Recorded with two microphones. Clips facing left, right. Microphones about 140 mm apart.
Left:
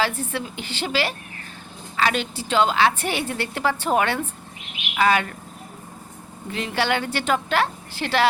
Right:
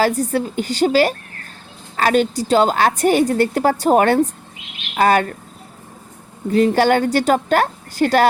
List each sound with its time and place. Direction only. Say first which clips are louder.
0.0 s a woman's voice: right 8 dB; 40° right (ahead or behind)
6.5 s a woman's voice: right 10 dB; 40° right (ahead or behind)